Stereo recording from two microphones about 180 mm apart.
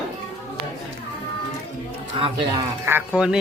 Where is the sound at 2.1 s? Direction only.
30° right (ahead or behind).